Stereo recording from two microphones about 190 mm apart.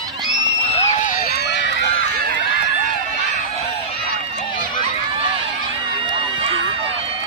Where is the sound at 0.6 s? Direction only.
35° left (ahead or behind).